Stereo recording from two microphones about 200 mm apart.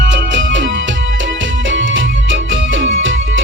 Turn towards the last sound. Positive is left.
turn(degrees=-70)  # may be behind; listen again after turning